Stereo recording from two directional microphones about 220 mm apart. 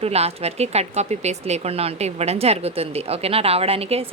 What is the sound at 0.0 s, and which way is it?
Speech, 30° right (ahead or behind).